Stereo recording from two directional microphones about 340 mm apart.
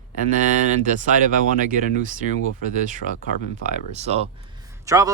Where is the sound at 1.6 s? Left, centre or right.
Right.